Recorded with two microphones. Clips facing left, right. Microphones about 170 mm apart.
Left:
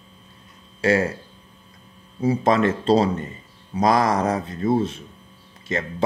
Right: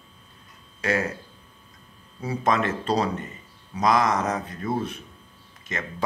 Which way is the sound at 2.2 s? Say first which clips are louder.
Left 6 dB; 25° left (ahead or behind).